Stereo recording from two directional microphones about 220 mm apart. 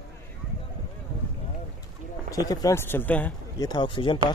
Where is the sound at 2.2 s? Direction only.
15° left (ahead or behind).